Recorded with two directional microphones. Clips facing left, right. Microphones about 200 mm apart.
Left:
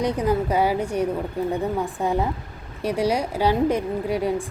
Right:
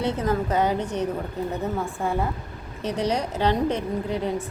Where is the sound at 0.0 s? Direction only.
15° left (ahead or behind).